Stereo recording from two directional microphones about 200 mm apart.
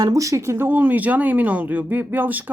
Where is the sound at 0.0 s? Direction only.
15° right (ahead or behind).